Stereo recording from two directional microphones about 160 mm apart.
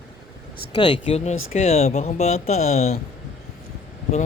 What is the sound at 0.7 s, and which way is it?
Speech, 35° left (ahead or behind).